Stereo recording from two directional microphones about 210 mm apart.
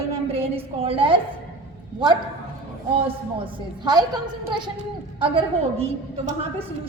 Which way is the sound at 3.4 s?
20° right (ahead or behind).